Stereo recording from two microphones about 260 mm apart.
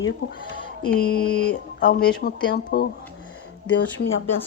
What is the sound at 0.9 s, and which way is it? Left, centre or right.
Speech, left.